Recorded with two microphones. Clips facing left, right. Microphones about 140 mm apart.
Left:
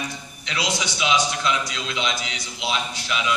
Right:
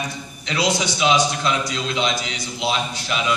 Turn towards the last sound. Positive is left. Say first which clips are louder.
# right 3 dB
turn(degrees=-40)  # may be behind; listen again after turning